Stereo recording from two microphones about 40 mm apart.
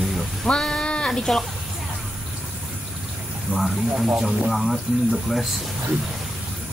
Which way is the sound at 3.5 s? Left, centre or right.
Right.